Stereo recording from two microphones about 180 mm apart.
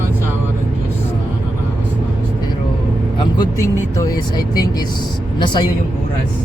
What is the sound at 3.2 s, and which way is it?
Speech, 20° left (ahead or behind).